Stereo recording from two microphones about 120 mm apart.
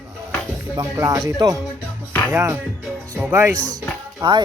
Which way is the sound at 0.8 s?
30° right (ahead or behind).